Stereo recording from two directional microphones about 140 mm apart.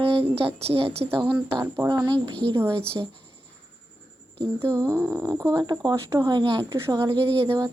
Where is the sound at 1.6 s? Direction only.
25° right (ahead or behind).